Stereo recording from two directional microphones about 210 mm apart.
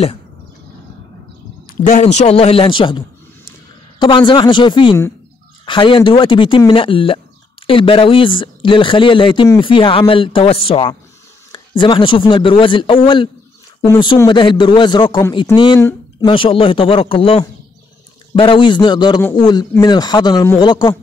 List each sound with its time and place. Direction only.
1.8 s a man's voice: 35° left (ahead or behind)
4.0 s a man's voice: 25° left (ahead or behind)